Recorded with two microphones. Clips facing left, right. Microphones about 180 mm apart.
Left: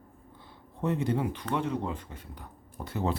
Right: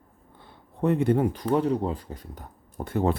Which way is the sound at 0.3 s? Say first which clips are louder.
Right 6 dB; 55° right (ahead or behind).